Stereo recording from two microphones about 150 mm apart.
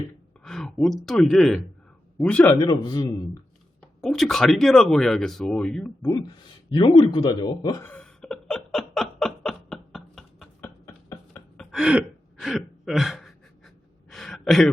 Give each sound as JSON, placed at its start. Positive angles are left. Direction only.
{"t": 0.4, "sound": "a man's voice", "side_deg": 5}
{"t": 2.6, "sound": "a man's voice", "side_deg": 25}
{"t": 3.8, "sound": "speech", "side_deg": 5}
{"t": 6.1, "sound": "a man's voice", "side_deg": 25}
{"t": 7.9, "sound": "laughter", "side_deg": 5}
{"t": 10.6, "sound": "a sound", "side_deg": 20}
{"t": 11.5, "sound": "throat clearing", "side_deg": 0}
{"t": 14.1, "sound": "a sound", "side_deg": 0}